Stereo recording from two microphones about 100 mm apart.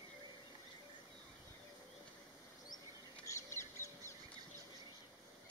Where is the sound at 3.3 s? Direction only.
30° left (ahead or behind).